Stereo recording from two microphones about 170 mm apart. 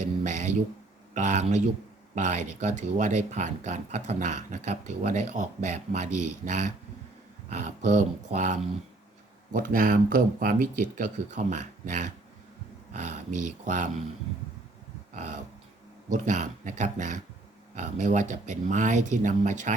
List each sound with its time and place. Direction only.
1.1 s speech: 45° right (ahead or behind)
15.1 s dog: 45° right (ahead or behind)
16.0 s speech: 50° right (ahead or behind)